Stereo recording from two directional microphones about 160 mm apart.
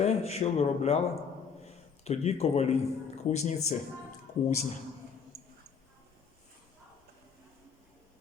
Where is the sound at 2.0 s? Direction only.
40° left (ahead or behind).